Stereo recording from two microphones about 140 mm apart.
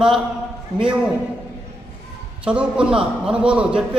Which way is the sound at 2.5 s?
5° right (ahead or behind).